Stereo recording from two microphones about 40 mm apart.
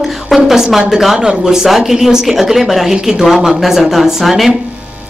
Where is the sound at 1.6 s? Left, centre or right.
Centre.